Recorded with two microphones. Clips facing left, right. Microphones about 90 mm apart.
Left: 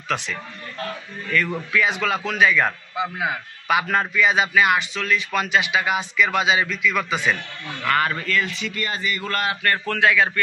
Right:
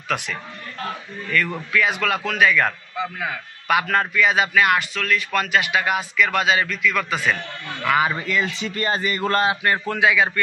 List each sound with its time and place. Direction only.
0.1 s a man's voice: 5° right (ahead or behind)
1.3 s a man's voice: centre (ahead or behind)
7.8 s speech: 10° right (ahead or behind)
8.5 s speech: 35° right (ahead or behind)
9.4 s speech: 20° right (ahead or behind)